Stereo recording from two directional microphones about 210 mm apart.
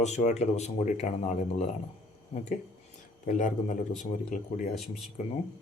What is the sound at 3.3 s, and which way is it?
Speech, 35° left (ahead or behind).